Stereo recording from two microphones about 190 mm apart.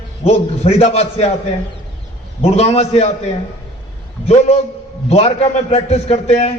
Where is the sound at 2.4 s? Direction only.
35° left (ahead or behind).